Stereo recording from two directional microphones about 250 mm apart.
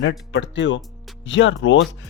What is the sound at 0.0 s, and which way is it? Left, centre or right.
Speech, left.